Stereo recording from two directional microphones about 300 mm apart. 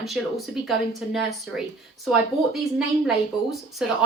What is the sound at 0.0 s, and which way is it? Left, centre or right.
Speech, centre.